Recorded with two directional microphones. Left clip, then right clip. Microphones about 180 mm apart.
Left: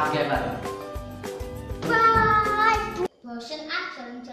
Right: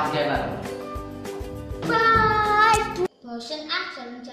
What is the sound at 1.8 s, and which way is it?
Music, 15° right (ahead or behind).